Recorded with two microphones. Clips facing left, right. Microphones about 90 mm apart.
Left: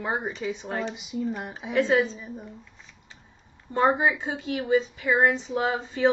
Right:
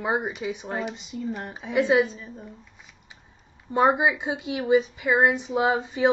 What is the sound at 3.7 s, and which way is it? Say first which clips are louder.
A woman's voice: right 2 dB; 15° right (ahead or behind).